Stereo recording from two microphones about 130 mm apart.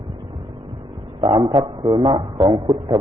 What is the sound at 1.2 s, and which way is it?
A man's voice, 40° right (ahead or behind).